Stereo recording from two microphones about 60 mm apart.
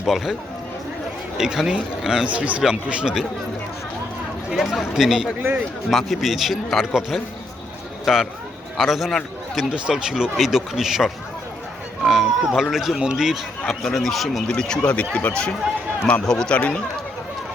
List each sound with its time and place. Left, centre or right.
0.0 s a man's voice: centre
1.4 s speech: centre
4.5 s a man's voice: centre
9.6 s a man's voice: centre
13.6 s a man's voice: centre
14.5 s speech: centre
16.6 s speech: left